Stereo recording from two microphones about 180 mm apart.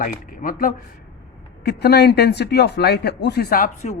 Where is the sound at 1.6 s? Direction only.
65° left (ahead or behind).